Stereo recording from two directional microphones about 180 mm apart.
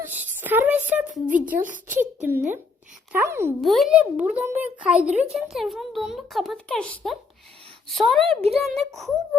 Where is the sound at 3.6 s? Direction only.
Centre (ahead or behind).